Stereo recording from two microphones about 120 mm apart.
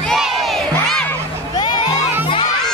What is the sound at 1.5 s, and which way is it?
Music, 35° left (ahead or behind).